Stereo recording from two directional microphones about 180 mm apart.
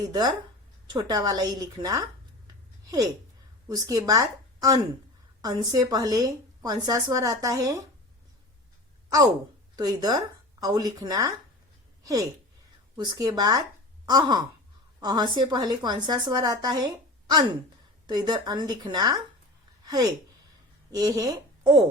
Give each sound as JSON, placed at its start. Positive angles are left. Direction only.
{"t": 0.0, "sound": "a woman's voice", "side_deg": -20}
{"t": 3.7, "sound": "a woman's voice", "side_deg": -20}
{"t": 9.7, "sound": "a woman's voice", "side_deg": -20}
{"t": 19.8, "sound": "a sound", "side_deg": -20}
{"t": 20.9, "sound": "a woman's voice", "side_deg": -20}